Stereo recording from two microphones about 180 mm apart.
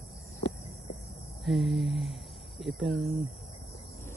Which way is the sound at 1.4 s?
Centre (ahead or behind).